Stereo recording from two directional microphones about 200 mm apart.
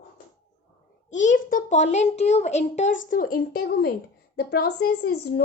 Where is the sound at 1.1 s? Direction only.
40° left (ahead or behind).